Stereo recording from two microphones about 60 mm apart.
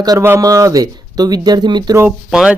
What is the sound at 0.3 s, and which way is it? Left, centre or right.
Speech, right.